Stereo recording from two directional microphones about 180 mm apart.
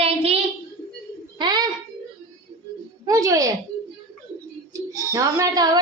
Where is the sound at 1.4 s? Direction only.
25° right (ahead or behind).